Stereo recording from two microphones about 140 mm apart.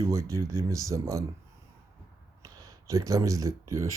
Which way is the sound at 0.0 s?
20° right (ahead or behind).